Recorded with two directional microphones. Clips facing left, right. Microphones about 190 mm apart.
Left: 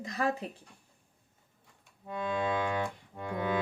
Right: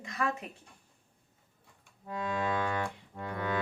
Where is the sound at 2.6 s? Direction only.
20° left (ahead or behind).